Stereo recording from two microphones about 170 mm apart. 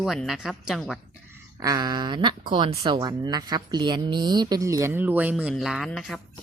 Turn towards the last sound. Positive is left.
turn(degrees=0)  # may be behind; listen again after turning